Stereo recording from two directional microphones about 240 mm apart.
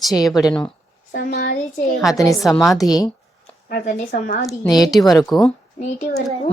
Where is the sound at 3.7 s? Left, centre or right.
Left.